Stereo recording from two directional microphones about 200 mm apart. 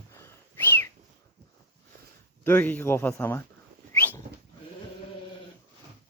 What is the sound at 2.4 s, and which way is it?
Speech, 10° left (ahead or behind).